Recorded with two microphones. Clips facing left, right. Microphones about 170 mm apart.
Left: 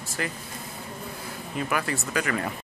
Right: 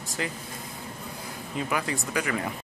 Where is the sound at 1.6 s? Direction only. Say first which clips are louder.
Left 1 dB; 20° right (ahead or behind).